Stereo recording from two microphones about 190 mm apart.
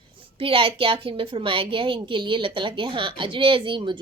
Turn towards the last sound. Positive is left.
turn(degrees=-25)  # may be behind; listen again after turning